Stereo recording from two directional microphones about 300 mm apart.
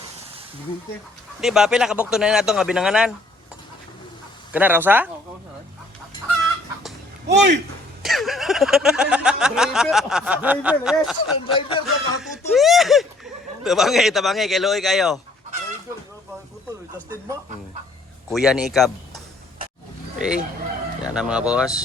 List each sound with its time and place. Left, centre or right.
1.4 s speech: centre
4.5 s speech: centre
7.3 s speech: right
8.0 s speech: centre
11.4 s a sound: centre
12.5 s speech: centre
18.3 s a man's voice: centre